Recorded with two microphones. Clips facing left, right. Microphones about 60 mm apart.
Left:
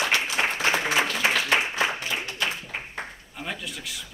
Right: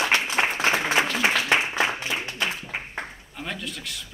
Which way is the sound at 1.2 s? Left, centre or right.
Centre.